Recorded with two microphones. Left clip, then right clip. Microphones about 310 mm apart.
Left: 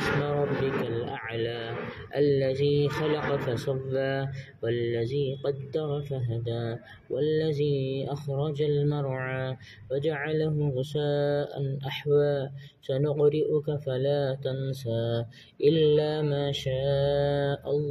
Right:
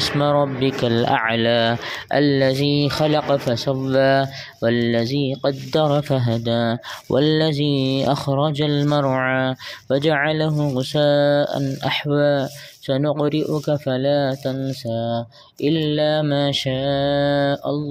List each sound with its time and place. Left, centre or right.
0.8 s speech: right